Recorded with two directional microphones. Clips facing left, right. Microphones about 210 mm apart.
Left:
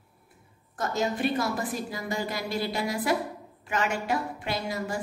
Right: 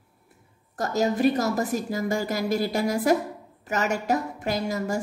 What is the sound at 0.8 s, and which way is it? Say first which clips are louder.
A woman's voice: right 5 dB; 40° right (ahead or behind).